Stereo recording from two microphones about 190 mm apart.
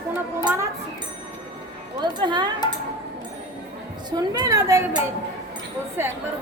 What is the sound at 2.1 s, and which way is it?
Speech, 25° right (ahead or behind).